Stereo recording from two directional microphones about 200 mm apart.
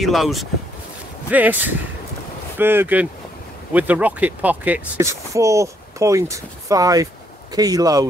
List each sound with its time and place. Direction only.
0.0 s speech: centre (ahead or behind); by 8.1 s 20° right (ahead or behind)